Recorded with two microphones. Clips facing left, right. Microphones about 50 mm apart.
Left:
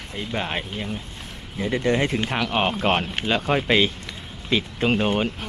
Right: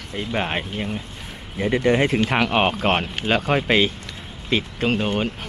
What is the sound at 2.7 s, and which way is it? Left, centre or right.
Speech, centre.